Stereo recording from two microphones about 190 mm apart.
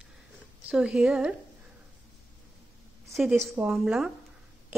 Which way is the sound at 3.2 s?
10° right (ahead or behind).